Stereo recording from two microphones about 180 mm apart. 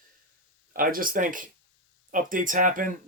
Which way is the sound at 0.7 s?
50° right (ahead or behind).